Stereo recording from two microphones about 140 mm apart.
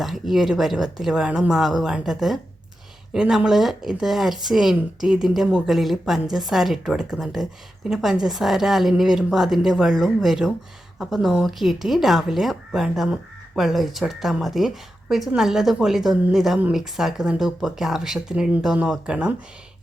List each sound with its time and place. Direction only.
0.0 s speech: centre (ahead or behind)